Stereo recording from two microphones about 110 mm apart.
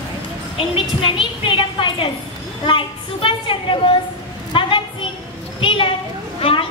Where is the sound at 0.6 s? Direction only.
55° left (ahead or behind).